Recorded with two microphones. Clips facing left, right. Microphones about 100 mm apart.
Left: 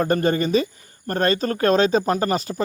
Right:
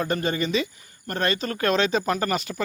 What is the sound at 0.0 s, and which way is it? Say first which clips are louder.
Speech: left 5 dB; 45° left (ahead or behind).